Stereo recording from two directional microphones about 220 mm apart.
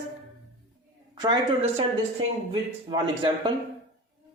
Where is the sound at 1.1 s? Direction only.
20° right (ahead or behind).